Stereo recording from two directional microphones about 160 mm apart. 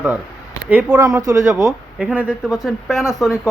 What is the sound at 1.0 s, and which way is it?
Speech, 20° right (ahead or behind).